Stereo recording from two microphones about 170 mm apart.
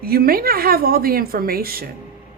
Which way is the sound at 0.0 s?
60° right (ahead or behind).